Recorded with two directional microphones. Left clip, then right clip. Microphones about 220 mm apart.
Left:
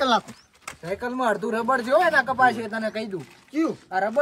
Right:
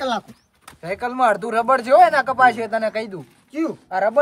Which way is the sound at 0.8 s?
25° right (ahead or behind).